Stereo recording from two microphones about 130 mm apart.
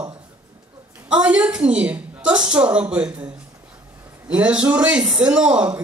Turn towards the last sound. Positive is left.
turn(degrees=-10)  # may be behind; listen again after turning